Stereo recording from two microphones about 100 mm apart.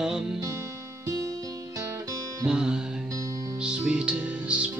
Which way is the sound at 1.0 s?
30° right (ahead or behind).